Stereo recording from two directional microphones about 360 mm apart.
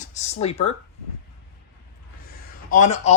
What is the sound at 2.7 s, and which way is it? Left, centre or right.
Speech, centre.